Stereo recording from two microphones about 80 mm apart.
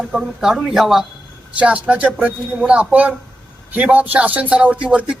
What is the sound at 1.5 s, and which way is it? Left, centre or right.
Speech, centre.